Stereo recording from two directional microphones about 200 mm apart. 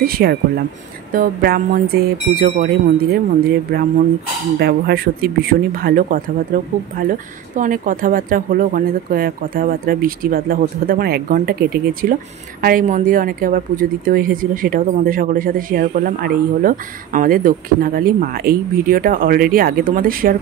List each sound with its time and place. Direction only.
0.0 s speech: 50° right (ahead or behind)
4.6 s speech: 55° right (ahead or behind)